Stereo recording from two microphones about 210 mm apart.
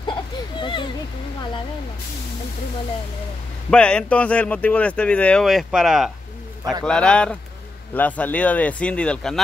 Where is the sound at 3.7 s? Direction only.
5° left (ahead or behind).